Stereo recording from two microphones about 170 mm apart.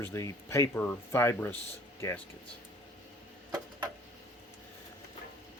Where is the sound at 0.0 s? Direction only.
15° left (ahead or behind).